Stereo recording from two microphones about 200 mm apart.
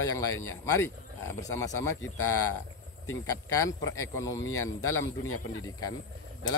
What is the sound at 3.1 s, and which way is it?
Speech, 15° left (ahead or behind).